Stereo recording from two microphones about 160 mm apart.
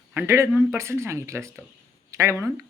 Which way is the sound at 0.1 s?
15° right (ahead or behind).